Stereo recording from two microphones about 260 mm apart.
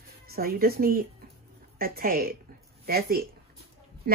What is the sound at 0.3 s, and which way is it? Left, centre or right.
Speech, right.